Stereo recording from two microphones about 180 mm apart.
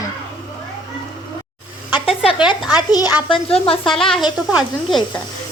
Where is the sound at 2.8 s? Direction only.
20° left (ahead or behind).